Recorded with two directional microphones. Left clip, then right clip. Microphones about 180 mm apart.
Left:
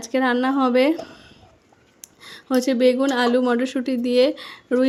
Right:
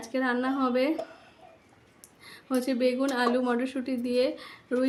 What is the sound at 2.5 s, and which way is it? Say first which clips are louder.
Speech: left 9 dB; 40° left (ahead or behind).